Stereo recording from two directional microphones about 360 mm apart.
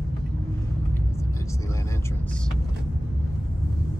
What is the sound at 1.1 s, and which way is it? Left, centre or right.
Vehicle, centre.